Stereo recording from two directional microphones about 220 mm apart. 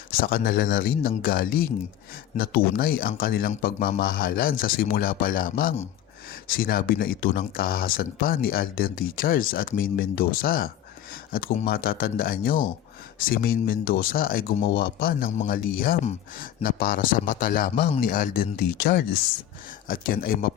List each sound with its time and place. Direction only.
0.1 s speech: 40° left (ahead or behind)